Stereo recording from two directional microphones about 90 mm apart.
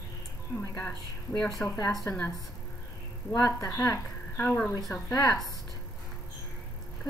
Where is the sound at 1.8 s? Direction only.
40° left (ahead or behind).